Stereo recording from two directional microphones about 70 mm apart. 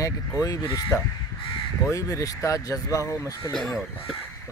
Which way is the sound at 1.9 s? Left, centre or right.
Left.